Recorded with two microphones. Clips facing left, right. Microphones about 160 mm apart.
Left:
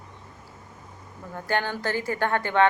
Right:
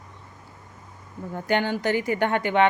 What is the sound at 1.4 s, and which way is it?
Speech, 20° right (ahead or behind).